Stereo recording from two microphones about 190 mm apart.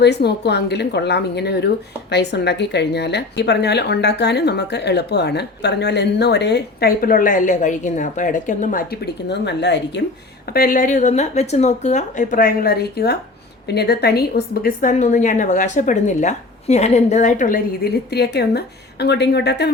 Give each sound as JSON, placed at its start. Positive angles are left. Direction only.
{"t": 0.0, "sound": "a woman's voice", "side_deg": 60}
{"t": 10.5, "sound": "a woman's voice", "side_deg": 50}